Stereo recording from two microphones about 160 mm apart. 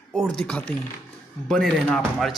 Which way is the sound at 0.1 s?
5° left (ahead or behind).